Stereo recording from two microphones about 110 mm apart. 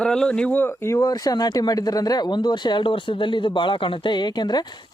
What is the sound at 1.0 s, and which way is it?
Speech, 35° left (ahead or behind).